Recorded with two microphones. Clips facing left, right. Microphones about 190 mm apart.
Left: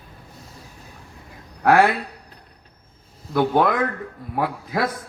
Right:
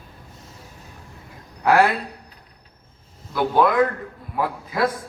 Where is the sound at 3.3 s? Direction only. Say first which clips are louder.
Left 1 dB; 55° left (ahead or behind).